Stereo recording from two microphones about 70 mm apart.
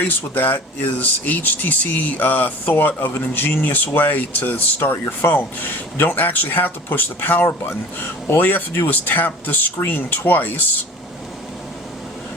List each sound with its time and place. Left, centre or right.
0.3 s speech: left